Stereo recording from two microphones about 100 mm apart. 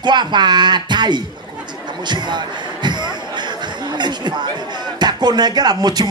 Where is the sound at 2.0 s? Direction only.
50° right (ahead or behind).